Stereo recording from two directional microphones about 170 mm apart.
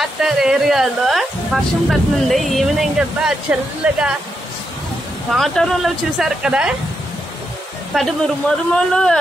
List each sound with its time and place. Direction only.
0.0 s speech: centre (ahead or behind)
5.3 s speech: centre (ahead or behind)
7.9 s speech: centre (ahead or behind)